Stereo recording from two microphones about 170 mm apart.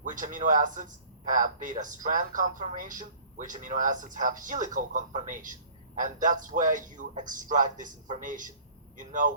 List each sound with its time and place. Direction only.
0.0 s speech: 50° right (ahead or behind)